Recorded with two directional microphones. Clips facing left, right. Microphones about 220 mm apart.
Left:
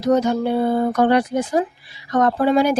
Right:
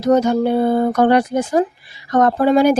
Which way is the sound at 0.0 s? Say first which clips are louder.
Right 3 dB; 50° right (ahead or behind).